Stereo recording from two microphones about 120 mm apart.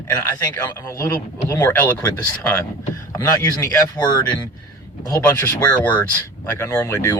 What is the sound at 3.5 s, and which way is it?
Speech, 35° left (ahead or behind).